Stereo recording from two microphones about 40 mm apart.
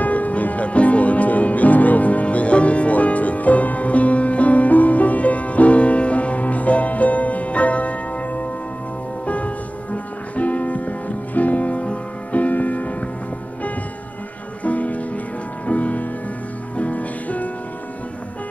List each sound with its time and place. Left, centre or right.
0.0 s music: left
14.6 s music: left